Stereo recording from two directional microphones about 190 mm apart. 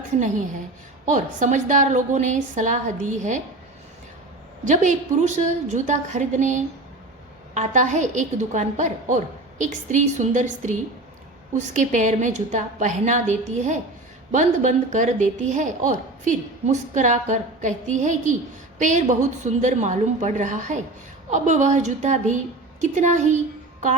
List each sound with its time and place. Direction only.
1.0 s speech: 40° right (ahead or behind)
4.6 s speech: 40° right (ahead or behind)